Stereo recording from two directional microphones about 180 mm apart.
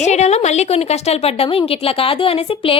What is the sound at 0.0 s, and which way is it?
A woman's voice, 40° left (ahead or behind).